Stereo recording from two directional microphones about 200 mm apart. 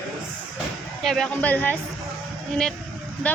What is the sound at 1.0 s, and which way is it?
Speech, centre (ahead or behind).